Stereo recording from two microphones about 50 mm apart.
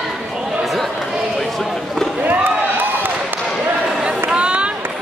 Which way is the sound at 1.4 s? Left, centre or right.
Centre.